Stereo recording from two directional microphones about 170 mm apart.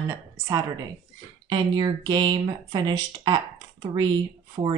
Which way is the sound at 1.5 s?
25° right (ahead or behind).